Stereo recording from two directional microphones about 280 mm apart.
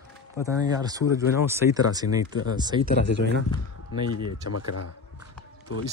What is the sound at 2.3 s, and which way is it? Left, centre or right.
Speech, left.